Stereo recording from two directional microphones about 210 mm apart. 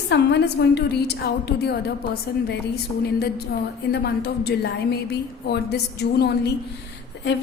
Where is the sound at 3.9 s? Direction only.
50° left (ahead or behind).